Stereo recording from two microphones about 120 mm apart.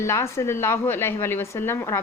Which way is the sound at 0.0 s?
25° left (ahead or behind).